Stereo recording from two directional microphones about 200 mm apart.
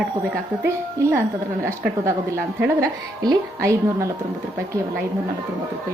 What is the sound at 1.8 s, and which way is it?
A woman's voice, 10° right (ahead or behind).